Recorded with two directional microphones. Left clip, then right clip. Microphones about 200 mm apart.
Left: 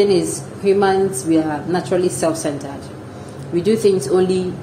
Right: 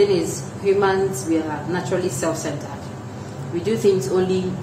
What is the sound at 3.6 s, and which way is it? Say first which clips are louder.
Speech: left 3 dB; 25° left (ahead or behind).